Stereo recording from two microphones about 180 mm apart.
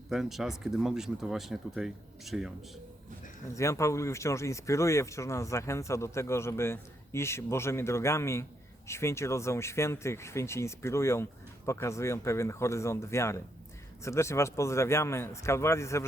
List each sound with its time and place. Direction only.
0.1 s speech: centre (ahead or behind)
3.5 s speech: 15° left (ahead or behind)